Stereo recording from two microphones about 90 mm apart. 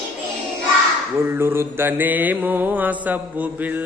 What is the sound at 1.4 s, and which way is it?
Mantra, 25° right (ahead or behind).